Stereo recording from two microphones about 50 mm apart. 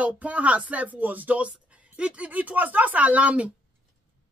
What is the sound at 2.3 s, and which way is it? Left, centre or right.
Speech, right.